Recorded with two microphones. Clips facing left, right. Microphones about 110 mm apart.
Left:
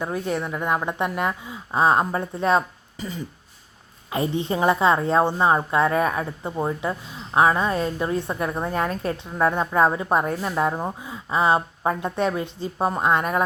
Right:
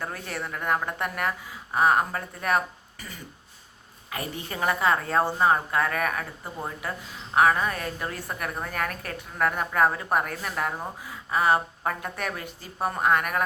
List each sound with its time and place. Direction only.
0.0 s a woman's voice: 20° left (ahead or behind)